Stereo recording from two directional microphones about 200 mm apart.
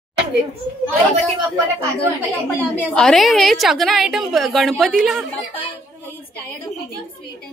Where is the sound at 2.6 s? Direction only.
5° left (ahead or behind).